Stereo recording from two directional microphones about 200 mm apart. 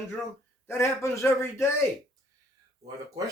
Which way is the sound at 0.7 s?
15° left (ahead or behind).